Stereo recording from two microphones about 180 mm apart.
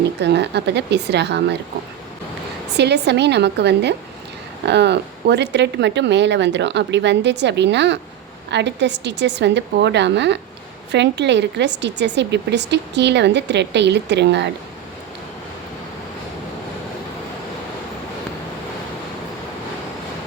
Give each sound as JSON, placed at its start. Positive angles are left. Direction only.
{"t": 0.0, "sound": "a woman's voice", "side_deg": -70}
{"t": 2.7, "sound": "a woman's voice", "side_deg": -70}